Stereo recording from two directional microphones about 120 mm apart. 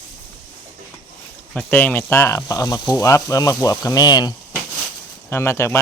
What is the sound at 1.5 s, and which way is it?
Speech, 10° left (ahead or behind).